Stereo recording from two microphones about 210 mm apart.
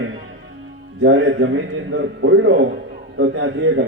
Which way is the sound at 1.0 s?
65° right (ahead or behind).